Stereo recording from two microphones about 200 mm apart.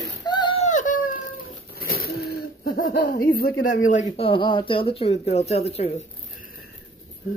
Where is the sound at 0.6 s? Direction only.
40° left (ahead or behind).